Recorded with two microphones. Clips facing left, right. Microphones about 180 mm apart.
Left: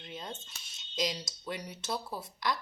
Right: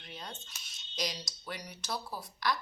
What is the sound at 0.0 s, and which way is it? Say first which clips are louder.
Speech: left 4 dB; 20° left (ahead or behind).